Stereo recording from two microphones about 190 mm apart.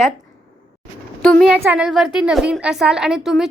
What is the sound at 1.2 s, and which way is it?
Speech, 5° left (ahead or behind).